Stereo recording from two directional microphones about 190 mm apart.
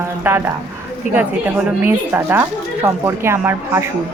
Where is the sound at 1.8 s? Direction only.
10° right (ahead or behind).